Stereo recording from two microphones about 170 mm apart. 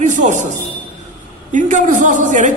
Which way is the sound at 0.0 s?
45° right (ahead or behind).